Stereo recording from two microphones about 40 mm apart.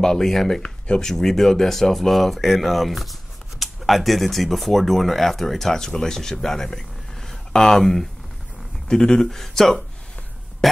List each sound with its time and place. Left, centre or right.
0.0 s speech: centre
0.6 s speech: left
1.0 s speech: centre
8.8 s speech: centre
10.6 s a sound: centre